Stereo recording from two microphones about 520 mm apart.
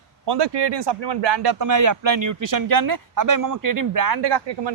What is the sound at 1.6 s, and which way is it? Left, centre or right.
Speech, right.